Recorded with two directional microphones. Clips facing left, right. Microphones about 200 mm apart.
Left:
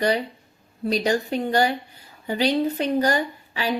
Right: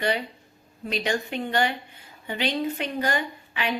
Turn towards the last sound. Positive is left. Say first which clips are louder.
# left 3 dB
turn(degrees=35)  # may be behind; listen again after turning